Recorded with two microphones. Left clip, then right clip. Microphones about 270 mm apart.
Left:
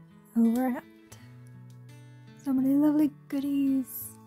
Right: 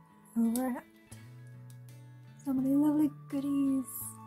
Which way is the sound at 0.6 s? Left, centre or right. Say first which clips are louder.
Left 5 dB; left.